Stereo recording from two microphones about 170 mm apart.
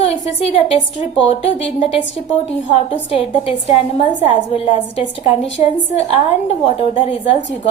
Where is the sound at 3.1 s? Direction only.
35° left (ahead or behind).